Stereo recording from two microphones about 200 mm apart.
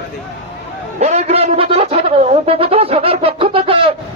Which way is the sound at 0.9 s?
35° right (ahead or behind).